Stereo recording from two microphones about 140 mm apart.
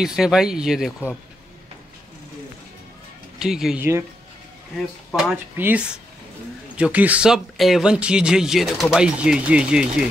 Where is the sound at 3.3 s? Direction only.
5° right (ahead or behind).